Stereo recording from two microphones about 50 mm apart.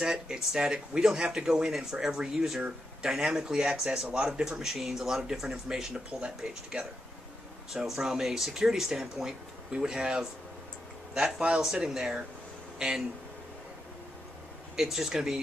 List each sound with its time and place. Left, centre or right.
0.0 s speech: centre
4.1 s speech: right
4.5 s speech: centre
7.7 s speech: centre
14.8 s speech: centre